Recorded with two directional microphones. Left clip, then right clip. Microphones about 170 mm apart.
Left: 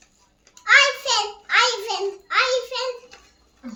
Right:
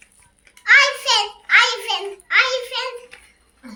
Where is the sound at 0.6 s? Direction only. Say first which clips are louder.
Right 2 dB; 25° left (ahead or behind).